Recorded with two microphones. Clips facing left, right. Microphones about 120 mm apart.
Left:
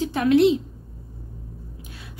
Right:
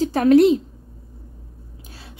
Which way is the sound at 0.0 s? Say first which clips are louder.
Right 4 dB; 40° right (ahead or behind).